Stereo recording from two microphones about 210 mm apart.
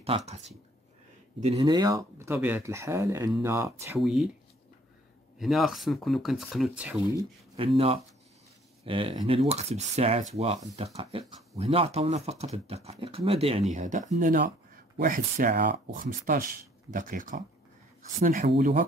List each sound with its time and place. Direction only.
0.0 s speech: 30° right (ahead or behind)
1.4 s speech: 25° right (ahead or behind)
4.0 s speech: centre (ahead or behind)
5.4 s speech: centre (ahead or behind)
7.2 s speech: 25° right (ahead or behind); by 18.9 s 45° right (ahead or behind)